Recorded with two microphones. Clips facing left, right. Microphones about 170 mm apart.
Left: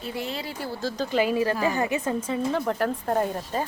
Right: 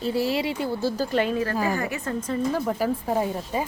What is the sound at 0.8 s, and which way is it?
Speech, centre (ahead or behind).